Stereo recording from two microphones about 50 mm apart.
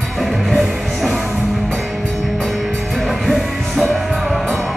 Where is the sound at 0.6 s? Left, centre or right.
Centre.